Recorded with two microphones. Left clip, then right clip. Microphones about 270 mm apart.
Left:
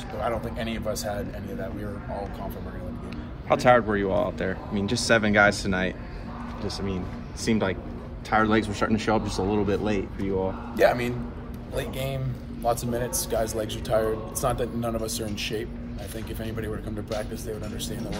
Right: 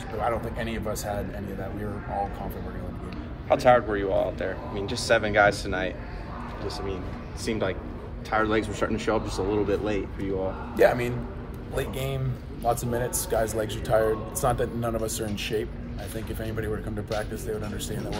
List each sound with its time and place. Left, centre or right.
0.2 s speech: centre
3.4 s speech: left
7.4 s speech: left
10.8 s a man's voice: centre